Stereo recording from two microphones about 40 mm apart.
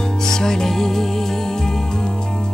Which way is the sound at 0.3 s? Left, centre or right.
Centre.